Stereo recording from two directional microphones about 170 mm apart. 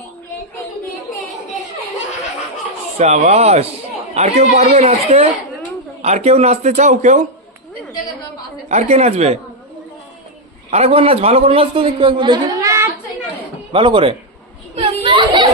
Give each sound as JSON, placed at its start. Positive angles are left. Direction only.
{"t": 3.0, "sound": "a man's voice", "side_deg": -45}
{"t": 8.6, "sound": "a man's voice", "side_deg": -40}
{"t": 10.7, "sound": "a man's voice", "side_deg": -35}
{"t": 13.7, "sound": "a man's voice", "side_deg": -30}
{"t": 14.8, "sound": "a sound", "side_deg": -30}